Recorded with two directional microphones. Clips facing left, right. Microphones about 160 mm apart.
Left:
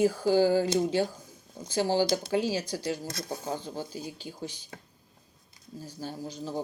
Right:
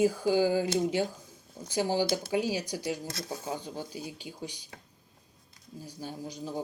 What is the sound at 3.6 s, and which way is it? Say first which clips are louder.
Speech: left 2 dB; 30° left (ahead or behind).